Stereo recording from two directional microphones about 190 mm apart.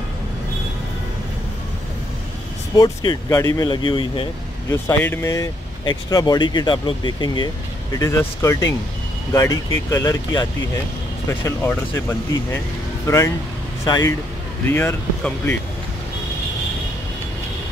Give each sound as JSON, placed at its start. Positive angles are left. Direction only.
{"t": 2.8, "sound": "speech", "side_deg": 20}
{"t": 4.8, "sound": "speech", "side_deg": 15}